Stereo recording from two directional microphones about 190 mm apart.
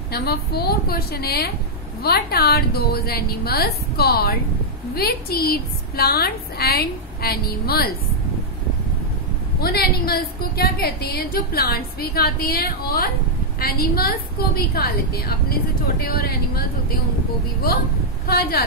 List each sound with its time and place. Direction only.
0.1 s a woman's voice: 55° left (ahead or behind)
9.6 s a woman's voice: 55° left (ahead or behind)
18.2 s speech: 55° left (ahead or behind)